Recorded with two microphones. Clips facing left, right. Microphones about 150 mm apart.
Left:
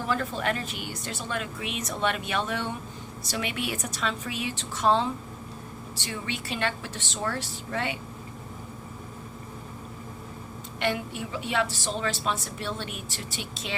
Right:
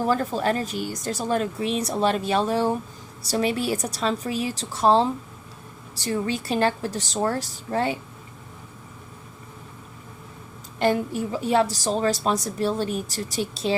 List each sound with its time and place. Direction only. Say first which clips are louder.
0.0 s a woman's voice: right 6 dB; 40° right (ahead or behind)
10.8 s a woman's voice: right 7 dB; 40° right (ahead or behind)